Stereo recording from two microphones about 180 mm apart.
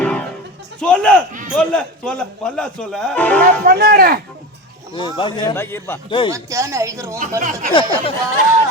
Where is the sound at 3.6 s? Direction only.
60° right (ahead or behind).